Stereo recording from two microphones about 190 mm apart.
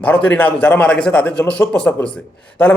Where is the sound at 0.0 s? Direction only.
5° left (ahead or behind).